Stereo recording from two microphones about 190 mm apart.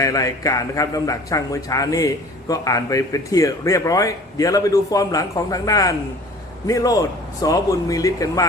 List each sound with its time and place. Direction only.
0.0 s a man's voice: 15° left (ahead or behind)